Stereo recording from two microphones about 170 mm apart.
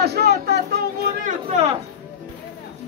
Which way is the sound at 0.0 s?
70° right (ahead or behind).